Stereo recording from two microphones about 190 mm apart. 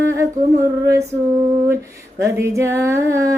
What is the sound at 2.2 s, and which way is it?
Music, 15° right (ahead or behind).